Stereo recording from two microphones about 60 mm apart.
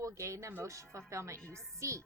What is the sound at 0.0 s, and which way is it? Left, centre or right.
Speech, right.